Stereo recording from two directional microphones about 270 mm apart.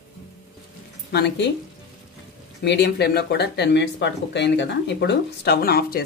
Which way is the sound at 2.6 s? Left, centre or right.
Left.